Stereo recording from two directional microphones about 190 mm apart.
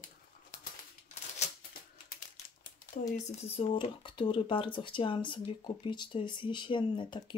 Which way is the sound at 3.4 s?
30° left (ahead or behind).